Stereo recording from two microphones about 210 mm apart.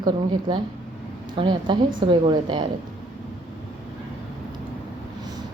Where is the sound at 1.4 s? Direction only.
25° right (ahead or behind).